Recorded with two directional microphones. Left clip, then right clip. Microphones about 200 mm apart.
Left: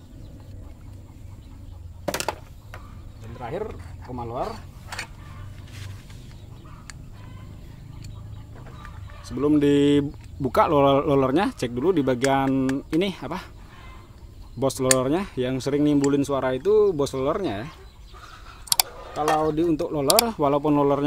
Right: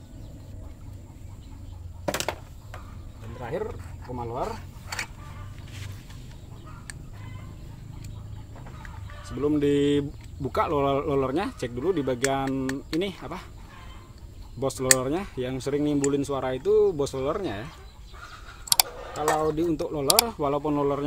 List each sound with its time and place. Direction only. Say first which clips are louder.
2.0 s a sound: left 1 dB; 30° left (ahead or behind)
3.3 s speech: left 1 dB; 30° left (ahead or behind)
9.2 s speech: left 4 dB; 50° left (ahead or behind)
14.6 s speech: left 3 dB; 50° left (ahead or behind)
18.7 s music: even; centre (ahead or behind)
19.1 s speech: left 3 dB; 45° left (ahead or behind)